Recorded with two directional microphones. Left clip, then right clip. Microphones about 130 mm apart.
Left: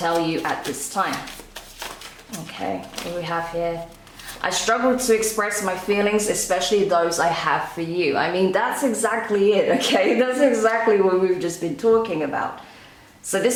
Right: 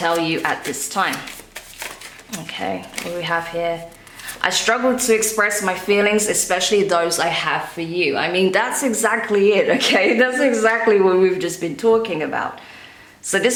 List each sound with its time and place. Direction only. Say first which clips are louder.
0.0 s speech: right 3 dB; 40° right (ahead or behind)
3.2 s speech: right 3 dB; 35° right (ahead or behind)
8.4 s a woman's voice: right 2 dB; 55° right (ahead or behind)
9.3 s speech: right 2 dB; 35° right (ahead or behind)